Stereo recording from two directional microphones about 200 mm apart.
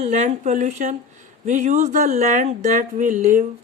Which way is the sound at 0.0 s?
35° right (ahead or behind).